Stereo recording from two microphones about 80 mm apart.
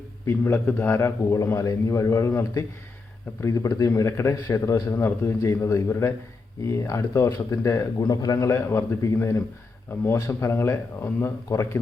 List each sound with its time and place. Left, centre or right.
0.3 s a man's voice: left
8.4 s a man's voice: left